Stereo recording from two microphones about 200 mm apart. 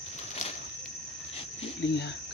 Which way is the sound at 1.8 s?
60° left (ahead or behind).